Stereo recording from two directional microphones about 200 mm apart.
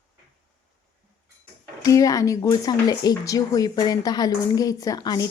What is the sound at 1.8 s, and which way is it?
Speech, 15° left (ahead or behind).